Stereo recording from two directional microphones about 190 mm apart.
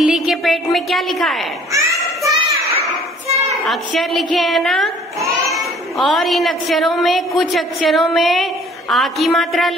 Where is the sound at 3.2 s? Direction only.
35° right (ahead or behind).